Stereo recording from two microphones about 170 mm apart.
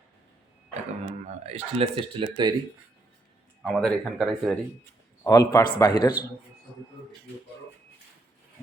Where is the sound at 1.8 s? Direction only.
30° right (ahead or behind).